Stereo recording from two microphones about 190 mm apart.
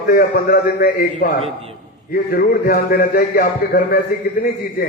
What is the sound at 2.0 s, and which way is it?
A man's voice, 50° left (ahead or behind).